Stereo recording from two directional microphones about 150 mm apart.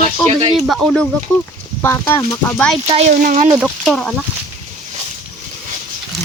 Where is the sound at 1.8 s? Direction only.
15° left (ahead or behind).